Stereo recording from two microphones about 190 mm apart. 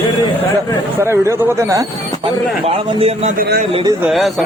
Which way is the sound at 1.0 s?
15° right (ahead or behind).